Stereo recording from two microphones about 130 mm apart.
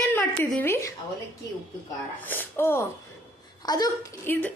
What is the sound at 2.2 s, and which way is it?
Speech, 15° left (ahead or behind).